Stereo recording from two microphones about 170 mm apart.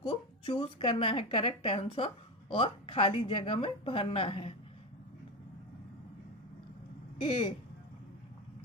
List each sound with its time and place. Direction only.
0.0 s a woman's voice: 35° left (ahead or behind)
7.2 s speech: 30° left (ahead or behind)